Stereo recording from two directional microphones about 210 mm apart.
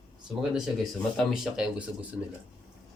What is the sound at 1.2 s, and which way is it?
Speech, centre (ahead or behind).